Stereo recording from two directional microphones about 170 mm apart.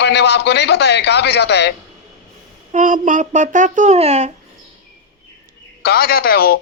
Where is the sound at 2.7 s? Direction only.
50° right (ahead or behind).